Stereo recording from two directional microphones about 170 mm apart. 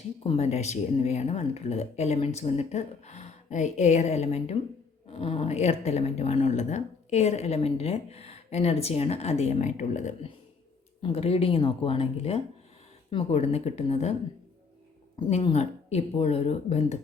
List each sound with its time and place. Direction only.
0.2 s a woman's voice: 35° left (ahead or behind)
15.3 s a woman's voice: 40° left (ahead or behind)